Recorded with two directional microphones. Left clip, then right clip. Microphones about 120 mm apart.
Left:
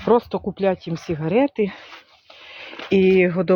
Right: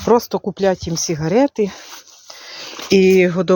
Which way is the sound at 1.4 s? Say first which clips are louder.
Right 4 dB; 45° right (ahead or behind).